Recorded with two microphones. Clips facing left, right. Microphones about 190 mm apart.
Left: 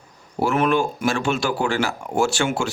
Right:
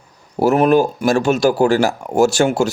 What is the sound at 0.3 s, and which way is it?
Speech, 40° right (ahead or behind).